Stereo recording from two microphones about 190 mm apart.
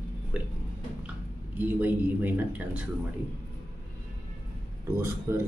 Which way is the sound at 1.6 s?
10° right (ahead or behind).